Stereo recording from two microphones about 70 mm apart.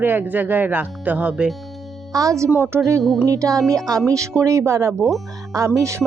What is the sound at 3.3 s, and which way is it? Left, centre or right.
Speech, right.